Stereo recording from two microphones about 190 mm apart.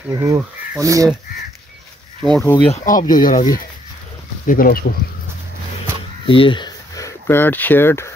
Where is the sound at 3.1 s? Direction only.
45° left (ahead or behind).